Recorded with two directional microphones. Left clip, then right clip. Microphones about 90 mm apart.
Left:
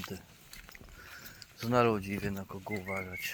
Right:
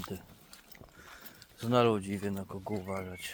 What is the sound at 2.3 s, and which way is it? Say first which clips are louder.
Speech: right 1 dB; 20° right (ahead or behind).